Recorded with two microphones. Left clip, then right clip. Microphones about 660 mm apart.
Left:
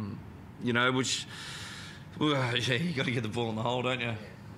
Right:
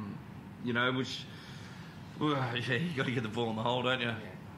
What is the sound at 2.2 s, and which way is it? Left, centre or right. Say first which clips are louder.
Speech: left 4 dB; left.